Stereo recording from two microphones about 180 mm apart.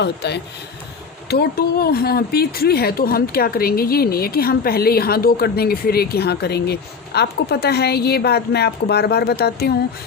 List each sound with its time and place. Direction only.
0.0 s speech: 70° left (ahead or behind)